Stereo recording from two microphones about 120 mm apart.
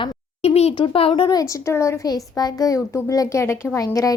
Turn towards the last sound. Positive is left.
turn(degrees=30)  # may be behind; listen again after turning